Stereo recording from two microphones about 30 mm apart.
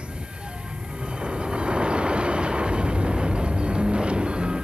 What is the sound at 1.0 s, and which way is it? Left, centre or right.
Vehicle, right.